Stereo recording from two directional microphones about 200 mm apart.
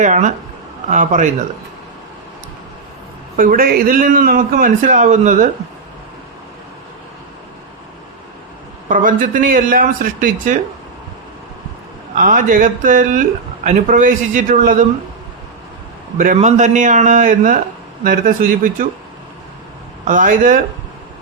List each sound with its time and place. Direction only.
0.0 s a man's voice: 40° right (ahead or behind)
3.3 s a man's voice: 45° right (ahead or behind)
8.9 s a man's voice: 40° right (ahead or behind)
12.1 s a man's voice: 40° right (ahead or behind)
16.1 s a man's voice: 40° right (ahead or behind)
20.1 s a man's voice: 40° right (ahead or behind)